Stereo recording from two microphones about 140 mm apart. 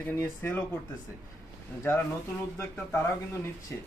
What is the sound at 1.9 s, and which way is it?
Speech, 15° left (ahead or behind).